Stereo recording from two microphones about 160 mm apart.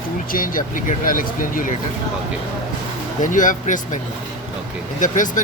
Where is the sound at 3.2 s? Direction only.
55° left (ahead or behind).